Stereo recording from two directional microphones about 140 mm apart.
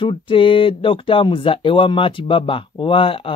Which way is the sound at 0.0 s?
40° left (ahead or behind).